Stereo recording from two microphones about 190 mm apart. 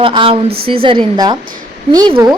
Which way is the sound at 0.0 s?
30° right (ahead or behind).